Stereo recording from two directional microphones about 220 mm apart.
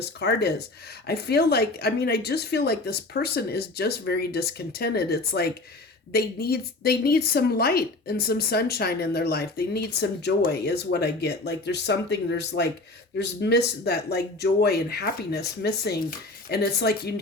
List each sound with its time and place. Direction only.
0.0 s a woman's voice: 50° left (ahead or behind)